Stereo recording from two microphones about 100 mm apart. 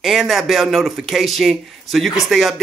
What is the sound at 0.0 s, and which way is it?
Speech, centre (ahead or behind).